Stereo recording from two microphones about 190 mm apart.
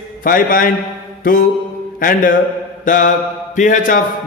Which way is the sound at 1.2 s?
50° left (ahead or behind).